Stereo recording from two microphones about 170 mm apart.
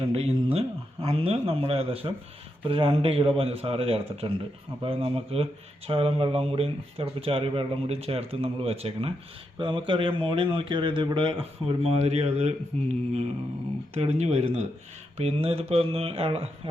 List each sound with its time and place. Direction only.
0.1 s a man's voice: 35° right (ahead or behind)